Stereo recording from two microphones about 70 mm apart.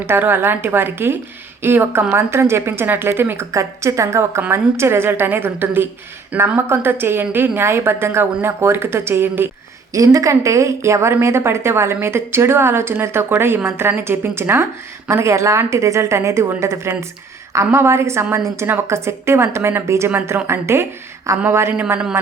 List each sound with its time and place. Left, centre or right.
0.0 s a woman's voice: right
3.5 s a woman's voice: right
9.9 s a woman's voice: right
21.7 s a man's voice: right